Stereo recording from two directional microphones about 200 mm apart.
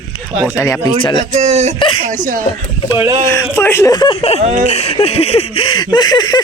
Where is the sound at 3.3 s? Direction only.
15° left (ahead or behind).